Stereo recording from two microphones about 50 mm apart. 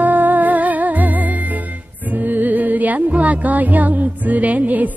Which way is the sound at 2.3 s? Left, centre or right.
Right.